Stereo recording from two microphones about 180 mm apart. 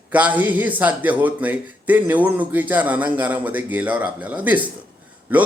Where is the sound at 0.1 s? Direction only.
10° right (ahead or behind).